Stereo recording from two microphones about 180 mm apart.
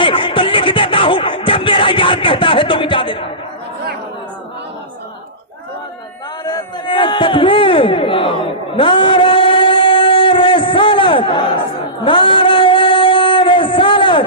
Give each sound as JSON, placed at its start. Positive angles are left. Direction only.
{"t": 0.0, "sound": "music", "side_deg": 30}
{"t": 6.4, "sound": "a sound", "side_deg": 25}
{"t": 12.0, "sound": "singing", "side_deg": 30}